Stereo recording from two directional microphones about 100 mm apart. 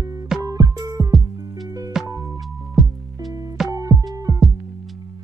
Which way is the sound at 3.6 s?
35° right (ahead or behind).